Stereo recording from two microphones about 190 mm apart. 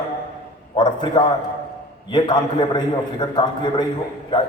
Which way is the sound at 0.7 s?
25° left (ahead or behind).